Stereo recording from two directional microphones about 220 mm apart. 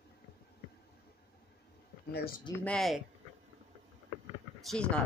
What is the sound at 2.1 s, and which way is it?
Speech, 45° left (ahead or behind).